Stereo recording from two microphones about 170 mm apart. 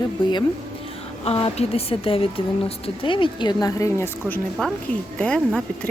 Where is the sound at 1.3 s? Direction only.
35° left (ahead or behind).